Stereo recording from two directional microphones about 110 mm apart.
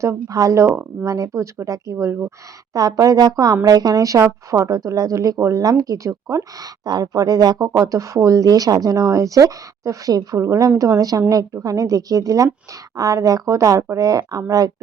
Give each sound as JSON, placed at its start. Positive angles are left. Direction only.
{"t": 0.0, "sound": "a woman's voice", "side_deg": -30}